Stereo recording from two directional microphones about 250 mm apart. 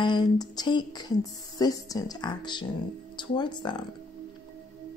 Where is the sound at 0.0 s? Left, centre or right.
Centre.